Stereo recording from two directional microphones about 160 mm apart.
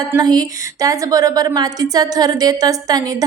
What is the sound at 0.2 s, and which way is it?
A woman's voice, 25° right (ahead or behind).